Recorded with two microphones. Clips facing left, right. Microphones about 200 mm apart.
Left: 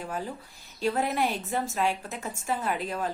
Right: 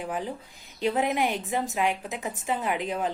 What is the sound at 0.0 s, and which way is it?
A woman's voice, 15° right (ahead or behind).